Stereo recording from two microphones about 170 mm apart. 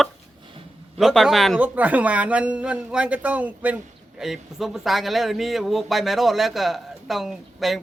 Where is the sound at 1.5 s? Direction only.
10° right (ahead or behind).